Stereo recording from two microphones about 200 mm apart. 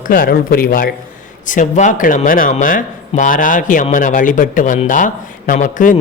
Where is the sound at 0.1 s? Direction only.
45° left (ahead or behind).